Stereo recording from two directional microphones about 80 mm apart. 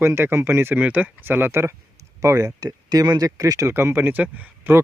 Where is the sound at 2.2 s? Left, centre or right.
Right.